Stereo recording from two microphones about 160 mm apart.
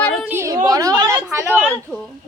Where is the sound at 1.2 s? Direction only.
5° right (ahead or behind).